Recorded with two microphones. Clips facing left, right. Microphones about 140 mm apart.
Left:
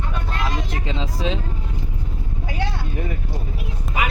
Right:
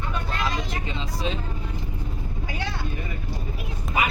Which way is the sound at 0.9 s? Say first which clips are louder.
Left 8 dB; 90° left.